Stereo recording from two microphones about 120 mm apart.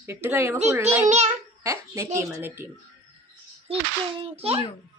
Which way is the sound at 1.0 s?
75° right (ahead or behind).